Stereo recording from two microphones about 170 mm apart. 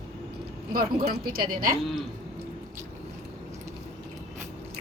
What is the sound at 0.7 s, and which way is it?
A woman's voice, 60° right (ahead or behind).